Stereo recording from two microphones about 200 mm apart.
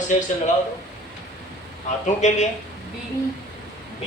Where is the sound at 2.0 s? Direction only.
35° left (ahead or behind).